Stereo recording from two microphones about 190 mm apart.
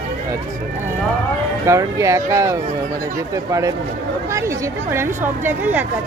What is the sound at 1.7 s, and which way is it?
A woman's voice, 15° right (ahead or behind).